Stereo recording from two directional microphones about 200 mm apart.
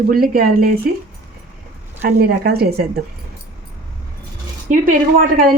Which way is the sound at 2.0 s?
45° right (ahead or behind).